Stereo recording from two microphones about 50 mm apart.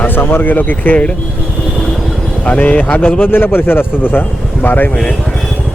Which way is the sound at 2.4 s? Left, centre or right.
Left.